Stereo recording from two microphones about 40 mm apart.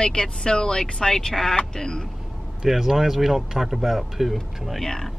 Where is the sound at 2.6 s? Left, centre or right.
Centre.